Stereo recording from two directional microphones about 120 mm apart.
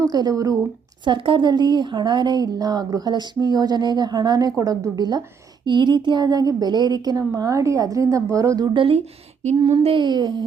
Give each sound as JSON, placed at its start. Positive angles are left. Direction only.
{"t": 0.0, "sound": "speech", "side_deg": -30}
{"t": 1.0, "sound": "speech", "side_deg": -45}
{"t": 9.6, "sound": "speech", "side_deg": -55}